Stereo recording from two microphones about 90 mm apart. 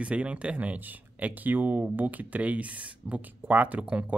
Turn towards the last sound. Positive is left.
turn(degrees=-15)  # may be behind; listen again after turning